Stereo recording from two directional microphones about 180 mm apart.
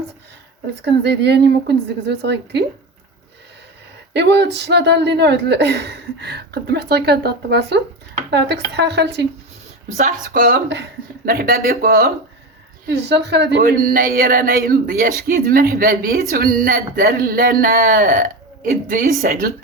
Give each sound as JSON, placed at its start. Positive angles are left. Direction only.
{"t": 0.8, "sound": "speech", "side_deg": -70}
{"t": 4.1, "sound": "speech", "side_deg": -70}
{"t": 10.0, "sound": "speech", "side_deg": -50}
{"t": 12.9, "sound": "speech", "side_deg": -70}